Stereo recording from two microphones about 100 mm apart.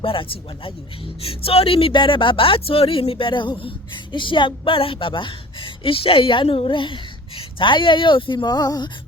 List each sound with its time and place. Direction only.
0.0 s speech: 65° left (ahead or behind); by 8.9 s 40° left (ahead or behind)